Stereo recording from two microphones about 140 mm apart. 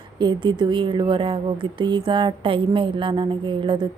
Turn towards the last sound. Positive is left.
turn(degrees=-35)  # may be behind; listen again after turning